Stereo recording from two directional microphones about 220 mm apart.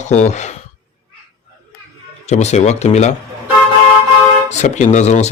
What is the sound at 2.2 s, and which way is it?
Speech, 30° left (ahead or behind).